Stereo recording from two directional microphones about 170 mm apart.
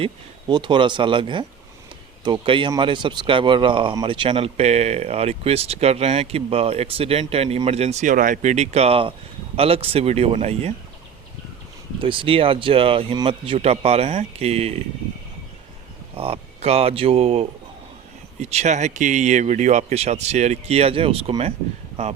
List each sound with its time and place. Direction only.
0.0 s speech: 30° right (ahead or behind)
11.9 s speech: 30° right (ahead or behind)
16.1 s speech: 35° right (ahead or behind)